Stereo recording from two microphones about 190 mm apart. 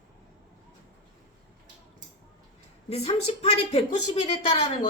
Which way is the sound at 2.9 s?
35° left (ahead or behind).